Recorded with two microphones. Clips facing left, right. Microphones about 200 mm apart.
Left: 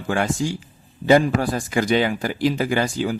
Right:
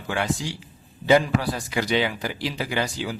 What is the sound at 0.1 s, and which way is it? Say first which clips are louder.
A man's voice: left 5 dB; 50° left (ahead or behind).